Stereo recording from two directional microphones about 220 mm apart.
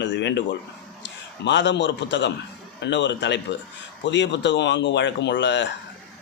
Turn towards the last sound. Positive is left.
turn(degrees=55)  # may be behind; listen again after turning